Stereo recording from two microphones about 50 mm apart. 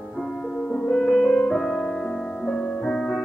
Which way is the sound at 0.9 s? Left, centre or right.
Centre.